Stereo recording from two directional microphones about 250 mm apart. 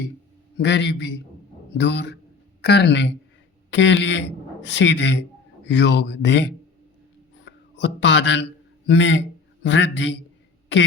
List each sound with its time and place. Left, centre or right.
0.5 s a man's voice: left